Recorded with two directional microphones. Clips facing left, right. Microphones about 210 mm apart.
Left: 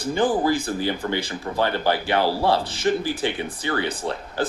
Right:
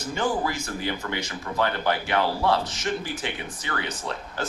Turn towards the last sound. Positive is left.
turn(degrees=30)  # may be behind; listen again after turning